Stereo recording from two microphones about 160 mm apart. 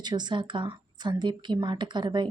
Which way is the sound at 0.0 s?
25° right (ahead or behind).